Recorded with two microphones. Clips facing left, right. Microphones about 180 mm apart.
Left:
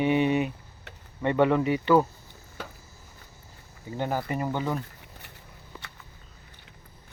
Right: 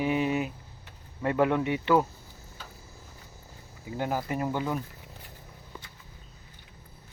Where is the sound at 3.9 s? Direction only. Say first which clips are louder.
Left 1 dB; 5° right (ahead or behind).